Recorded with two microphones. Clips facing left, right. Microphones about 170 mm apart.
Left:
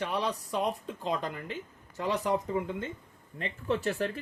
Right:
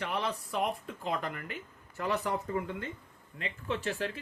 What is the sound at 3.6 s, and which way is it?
Speech, 40° left (ahead or behind).